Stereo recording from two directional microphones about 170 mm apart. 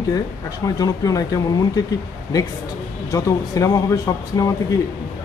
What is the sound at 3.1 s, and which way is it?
Speech, 20° left (ahead or behind).